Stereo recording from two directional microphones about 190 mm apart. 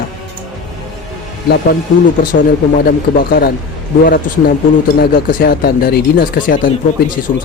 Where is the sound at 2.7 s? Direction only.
50° left (ahead or behind).